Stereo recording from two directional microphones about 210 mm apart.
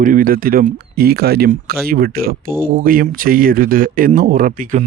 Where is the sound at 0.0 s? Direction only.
40° right (ahead or behind).